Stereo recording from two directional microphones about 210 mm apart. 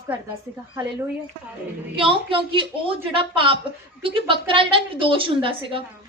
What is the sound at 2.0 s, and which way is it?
A woman's voice, 25° right (ahead or behind).